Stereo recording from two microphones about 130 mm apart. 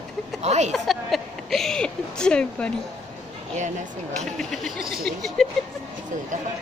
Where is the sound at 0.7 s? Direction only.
Centre (ahead or behind).